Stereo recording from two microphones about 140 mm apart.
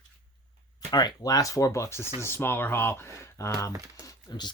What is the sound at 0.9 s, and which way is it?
Speech, 30° left (ahead or behind).